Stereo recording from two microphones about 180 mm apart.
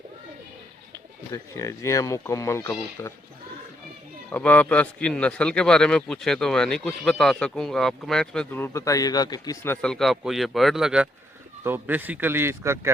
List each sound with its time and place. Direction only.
1.3 s speech: 15° left (ahead or behind)
4.3 s a man's voice: 10° left (ahead or behind)
9.8 s a man's voice: centre (ahead or behind); by 12.9 s 15° right (ahead or behind)